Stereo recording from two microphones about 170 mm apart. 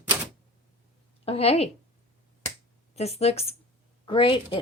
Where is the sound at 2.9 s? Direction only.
40° left (ahead or behind).